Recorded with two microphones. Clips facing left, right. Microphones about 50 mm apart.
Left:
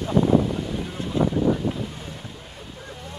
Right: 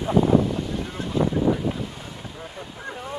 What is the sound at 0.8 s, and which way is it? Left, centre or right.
Boat, centre.